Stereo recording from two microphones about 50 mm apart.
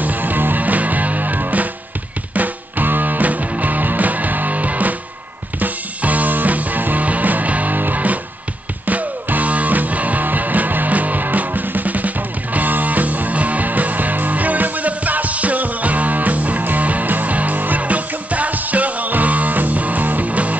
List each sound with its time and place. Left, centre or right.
0.0 s music: right